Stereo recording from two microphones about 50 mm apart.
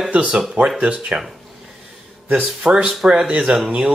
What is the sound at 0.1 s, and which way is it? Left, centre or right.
Speech, right.